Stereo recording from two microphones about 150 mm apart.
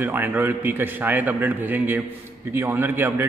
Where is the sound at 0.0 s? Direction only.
10° right (ahead or behind).